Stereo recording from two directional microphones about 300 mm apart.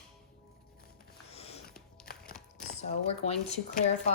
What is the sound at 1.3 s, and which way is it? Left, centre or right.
Music, centre.